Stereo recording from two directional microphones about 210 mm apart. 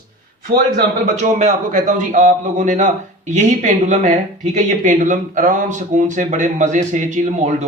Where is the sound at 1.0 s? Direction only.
35° right (ahead or behind).